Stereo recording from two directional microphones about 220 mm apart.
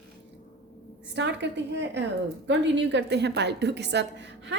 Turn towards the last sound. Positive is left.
turn(degrees=-55)  # may be behind; listen again after turning